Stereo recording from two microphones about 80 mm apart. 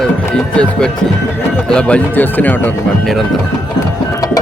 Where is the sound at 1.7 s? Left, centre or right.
Centre.